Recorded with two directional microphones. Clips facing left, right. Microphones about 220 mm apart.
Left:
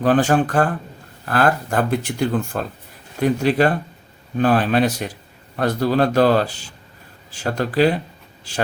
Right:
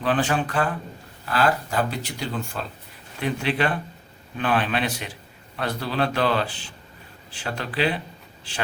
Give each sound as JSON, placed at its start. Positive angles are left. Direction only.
{"t": 0.0, "sound": "speech", "side_deg": 45}